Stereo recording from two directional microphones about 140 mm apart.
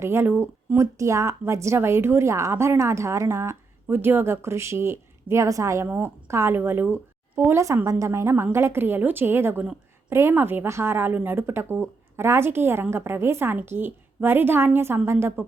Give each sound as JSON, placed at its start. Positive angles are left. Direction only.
{"t": 0.0, "sound": "a woman's voice", "side_deg": -15}